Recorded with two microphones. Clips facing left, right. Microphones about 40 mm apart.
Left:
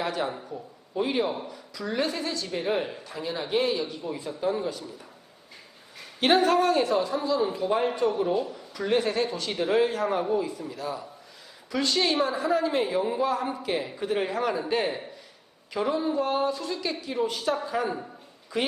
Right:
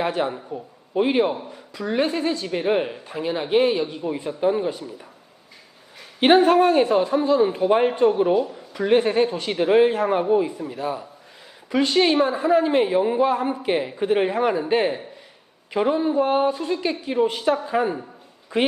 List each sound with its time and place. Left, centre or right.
0.0 s a woman's voice: right
6.1 s a woman's voice: right